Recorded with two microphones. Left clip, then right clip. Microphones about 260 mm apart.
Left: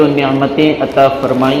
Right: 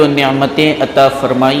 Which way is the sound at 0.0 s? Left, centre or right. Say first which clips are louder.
Right 1 dB; right.